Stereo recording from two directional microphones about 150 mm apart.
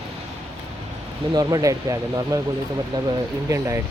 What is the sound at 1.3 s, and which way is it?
Speech, 25° right (ahead or behind).